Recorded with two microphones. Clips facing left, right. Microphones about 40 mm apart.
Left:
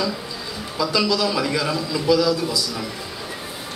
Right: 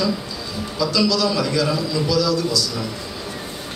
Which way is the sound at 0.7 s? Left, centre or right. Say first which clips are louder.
Right 1 dB; centre.